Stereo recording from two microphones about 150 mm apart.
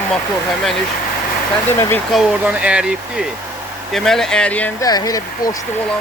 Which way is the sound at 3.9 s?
5° left (ahead or behind).